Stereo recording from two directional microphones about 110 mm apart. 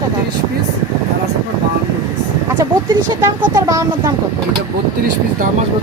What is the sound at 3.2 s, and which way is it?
Speech, 30° right (ahead or behind).